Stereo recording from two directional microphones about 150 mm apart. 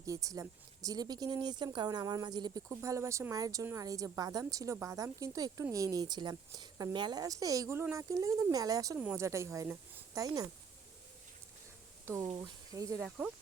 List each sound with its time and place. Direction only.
0.0 s speech: 20° right (ahead or behind)
12.0 s speech: 20° right (ahead or behind)
13.0 s speech: 5° right (ahead or behind)